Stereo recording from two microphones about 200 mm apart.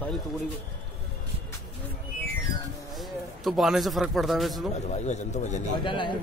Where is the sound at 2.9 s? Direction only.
Centre (ahead or behind).